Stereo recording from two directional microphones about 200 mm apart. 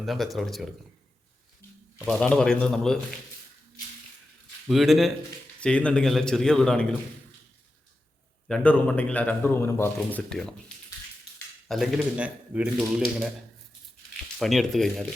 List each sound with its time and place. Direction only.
0.0 s speech: centre (ahead or behind)
2.0 s speech: centre (ahead or behind)
4.7 s speech: centre (ahead or behind)
8.4 s a man's voice: 5° left (ahead or behind)
11.7 s speech: centre (ahead or behind)
14.3 s speech: centre (ahead or behind)